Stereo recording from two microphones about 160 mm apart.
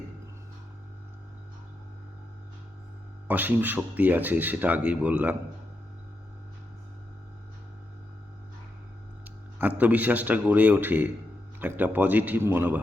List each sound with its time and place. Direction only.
3.2 s speech: 10° right (ahead or behind)
9.2 s speech: 10° right (ahead or behind)